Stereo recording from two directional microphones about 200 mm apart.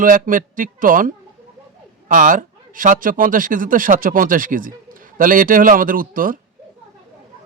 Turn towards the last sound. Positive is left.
turn(degrees=-45)  # may be behind; listen again after turning